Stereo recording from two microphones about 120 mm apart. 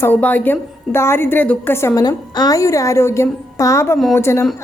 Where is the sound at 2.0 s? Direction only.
35° left (ahead or behind).